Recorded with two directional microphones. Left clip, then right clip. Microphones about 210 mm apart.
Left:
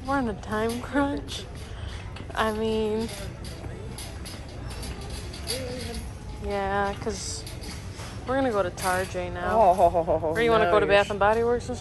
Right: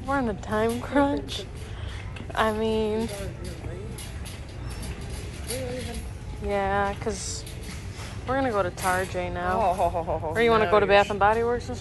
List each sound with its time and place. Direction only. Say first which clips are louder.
0.1 s speech: right 1 dB; 10° left (ahead or behind)
6.5 s speech: right 2 dB; 10° left (ahead or behind)
9.6 s speech: left 7 dB; 45° left (ahead or behind)
10.3 s speech: right 2 dB; 5° left (ahead or behind)